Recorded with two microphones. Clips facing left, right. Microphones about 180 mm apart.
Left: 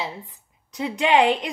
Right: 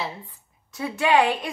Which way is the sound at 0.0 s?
15° left (ahead or behind).